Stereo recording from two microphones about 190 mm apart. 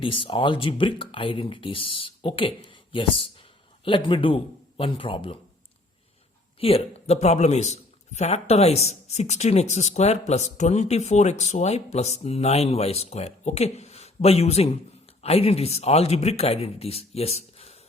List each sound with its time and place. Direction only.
0.0 s speech: 25° left (ahead or behind)
6.6 s speech: 30° left (ahead or behind)